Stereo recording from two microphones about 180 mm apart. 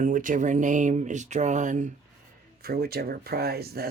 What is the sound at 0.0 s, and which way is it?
Speech, 45° right (ahead or behind).